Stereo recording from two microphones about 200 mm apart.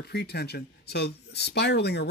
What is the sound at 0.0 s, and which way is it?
Speech, 55° left (ahead or behind).